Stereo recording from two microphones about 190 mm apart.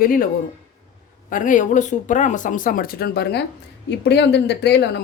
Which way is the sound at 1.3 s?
45° left (ahead or behind).